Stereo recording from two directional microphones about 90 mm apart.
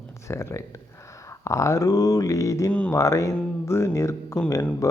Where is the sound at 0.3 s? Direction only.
30° left (ahead or behind).